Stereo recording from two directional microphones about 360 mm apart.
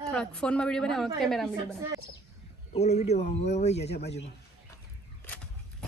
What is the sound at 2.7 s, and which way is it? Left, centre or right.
Speech, centre.